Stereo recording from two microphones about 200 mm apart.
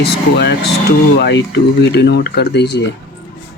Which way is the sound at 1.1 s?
55° left (ahead or behind).